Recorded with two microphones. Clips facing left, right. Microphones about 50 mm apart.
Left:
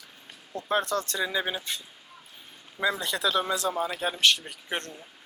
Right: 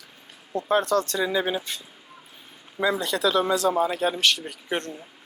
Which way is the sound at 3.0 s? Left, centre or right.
Centre.